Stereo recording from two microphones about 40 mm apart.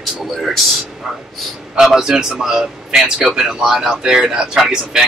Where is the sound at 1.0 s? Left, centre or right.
Centre.